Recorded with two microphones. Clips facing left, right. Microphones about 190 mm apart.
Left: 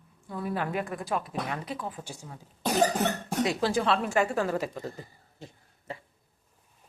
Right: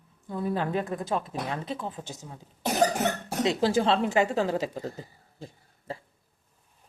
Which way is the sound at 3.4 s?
25° right (ahead or behind).